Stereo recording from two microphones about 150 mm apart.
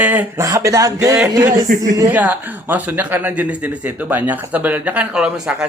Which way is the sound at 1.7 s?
65° right (ahead or behind).